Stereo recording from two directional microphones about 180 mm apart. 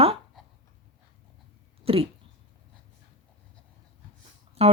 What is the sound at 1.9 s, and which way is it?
Speech, 30° right (ahead or behind).